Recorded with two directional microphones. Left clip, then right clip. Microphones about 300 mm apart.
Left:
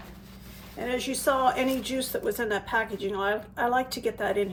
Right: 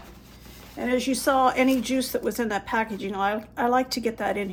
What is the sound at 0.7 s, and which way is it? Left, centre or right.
Speech, right.